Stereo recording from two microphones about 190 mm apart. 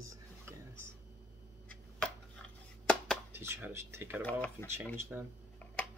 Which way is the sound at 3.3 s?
10° right (ahead or behind).